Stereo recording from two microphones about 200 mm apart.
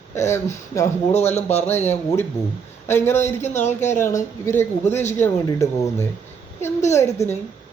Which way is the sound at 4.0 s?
10° left (ahead or behind).